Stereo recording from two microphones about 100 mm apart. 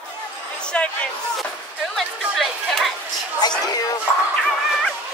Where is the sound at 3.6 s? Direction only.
40° left (ahead or behind).